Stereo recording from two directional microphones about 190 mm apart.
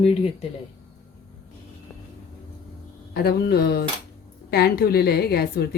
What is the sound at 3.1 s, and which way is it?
A woman's voice, 55° left (ahead or behind).